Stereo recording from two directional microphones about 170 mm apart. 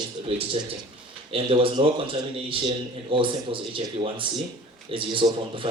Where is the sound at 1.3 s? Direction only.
30° right (ahead or behind).